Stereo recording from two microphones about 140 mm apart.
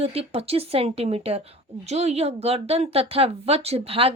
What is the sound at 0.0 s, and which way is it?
A woman's voice, 45° right (ahead or behind).